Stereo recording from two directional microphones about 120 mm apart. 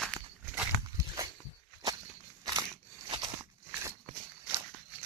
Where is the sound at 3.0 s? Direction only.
40° right (ahead or behind).